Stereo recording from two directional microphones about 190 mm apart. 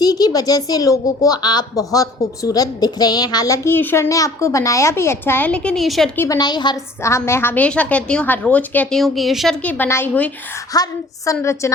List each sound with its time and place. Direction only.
0.0 s speech: 20° left (ahead or behind); by 6.1 s centre (ahead or behind)
6.1 s a woman's voice: 20° left (ahead or behind)